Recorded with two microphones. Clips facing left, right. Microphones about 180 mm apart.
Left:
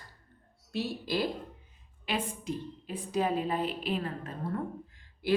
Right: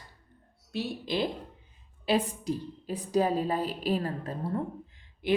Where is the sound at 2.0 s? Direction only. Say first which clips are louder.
Right 6 dB; 35° right (ahead or behind).